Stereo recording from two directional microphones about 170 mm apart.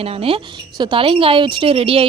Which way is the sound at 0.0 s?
35° right (ahead or behind).